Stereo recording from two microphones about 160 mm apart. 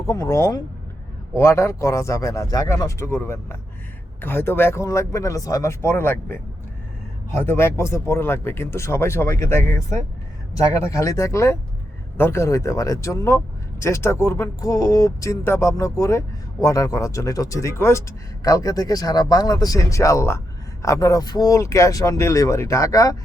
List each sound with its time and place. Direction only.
0.0 s speech: 20° left (ahead or behind)
10.8 s speech: 20° left (ahead or behind)